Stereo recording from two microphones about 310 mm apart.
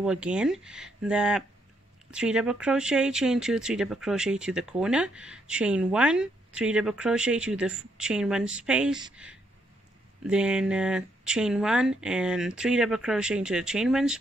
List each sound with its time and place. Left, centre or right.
0.0 s speech: centre